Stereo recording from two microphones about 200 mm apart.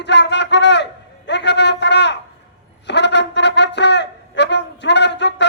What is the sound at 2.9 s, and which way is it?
Wind instrument, 60° left (ahead or behind).